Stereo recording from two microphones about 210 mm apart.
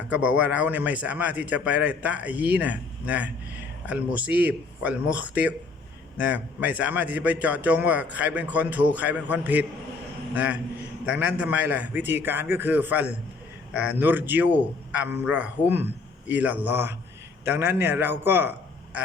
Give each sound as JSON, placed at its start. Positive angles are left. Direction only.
{"t": 0.1, "sound": "a man's voice", "side_deg": -5}